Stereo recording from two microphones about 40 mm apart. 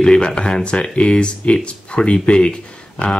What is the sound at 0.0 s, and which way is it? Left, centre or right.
Speech, left.